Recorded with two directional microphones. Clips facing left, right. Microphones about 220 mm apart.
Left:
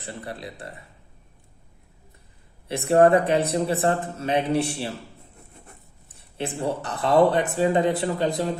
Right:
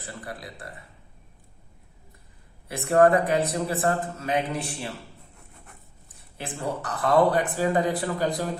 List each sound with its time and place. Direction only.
0.0 s speech: 25° left (ahead or behind)
2.6 s speech: 25° left (ahead or behind)
6.3 s speech: 25° left (ahead or behind)